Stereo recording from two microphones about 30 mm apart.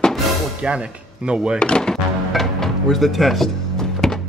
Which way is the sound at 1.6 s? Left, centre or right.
Left.